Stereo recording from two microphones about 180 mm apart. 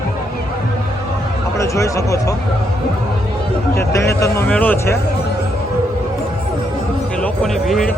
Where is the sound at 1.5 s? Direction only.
15° left (ahead or behind).